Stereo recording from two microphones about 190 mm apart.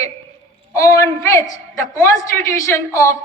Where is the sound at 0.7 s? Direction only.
15° left (ahead or behind).